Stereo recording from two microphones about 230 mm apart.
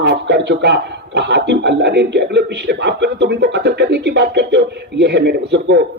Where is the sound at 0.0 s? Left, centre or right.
Right.